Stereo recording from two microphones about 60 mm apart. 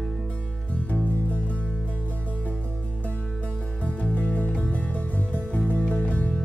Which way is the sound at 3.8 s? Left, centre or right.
Left.